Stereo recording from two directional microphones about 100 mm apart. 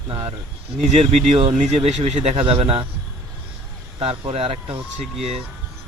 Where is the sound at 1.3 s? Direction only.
65° right (ahead or behind).